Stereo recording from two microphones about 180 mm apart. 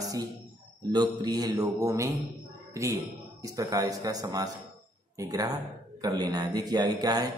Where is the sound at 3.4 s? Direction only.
20° right (ahead or behind).